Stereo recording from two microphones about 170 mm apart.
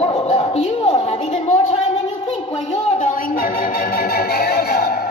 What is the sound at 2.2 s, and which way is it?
Music, 35° left (ahead or behind).